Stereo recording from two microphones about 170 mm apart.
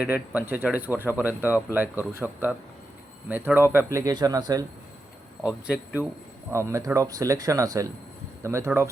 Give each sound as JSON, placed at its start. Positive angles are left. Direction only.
{"t": 0.0, "sound": "speech", "side_deg": -10}
{"t": 5.6, "sound": "speech", "side_deg": -10}